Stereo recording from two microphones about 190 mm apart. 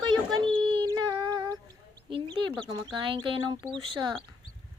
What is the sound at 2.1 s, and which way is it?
Chicken, 25° right (ahead or behind).